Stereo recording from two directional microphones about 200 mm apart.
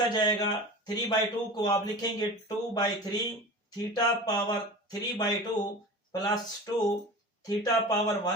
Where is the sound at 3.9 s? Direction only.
20° left (ahead or behind).